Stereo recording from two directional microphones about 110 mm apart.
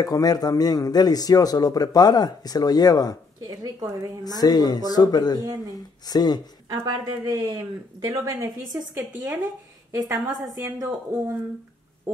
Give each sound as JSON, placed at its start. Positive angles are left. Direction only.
{"t": 0.0, "sound": "a man's voice", "side_deg": 35}
{"t": 3.4, "sound": "a woman's voice", "side_deg": -35}
{"t": 4.2, "sound": "a man's voice", "side_deg": 35}
{"t": 7.2, "sound": "a woman's voice", "side_deg": -30}